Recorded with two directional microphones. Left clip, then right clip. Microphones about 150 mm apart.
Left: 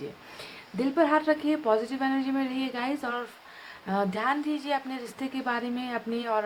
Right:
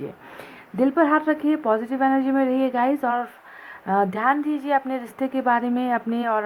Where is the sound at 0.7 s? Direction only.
35° right (ahead or behind).